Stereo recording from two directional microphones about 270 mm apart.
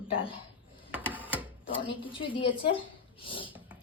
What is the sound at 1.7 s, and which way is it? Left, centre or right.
A woman's voice, centre.